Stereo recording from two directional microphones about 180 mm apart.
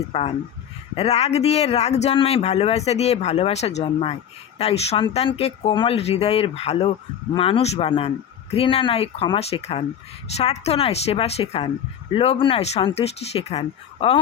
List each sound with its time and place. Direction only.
0.1 s a man's voice: 35° left (ahead or behind)